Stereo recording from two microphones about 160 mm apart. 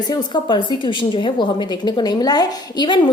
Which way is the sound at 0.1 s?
30° left (ahead or behind).